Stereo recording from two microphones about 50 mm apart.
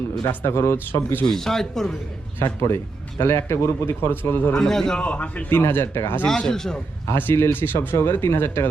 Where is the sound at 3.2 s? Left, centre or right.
Left.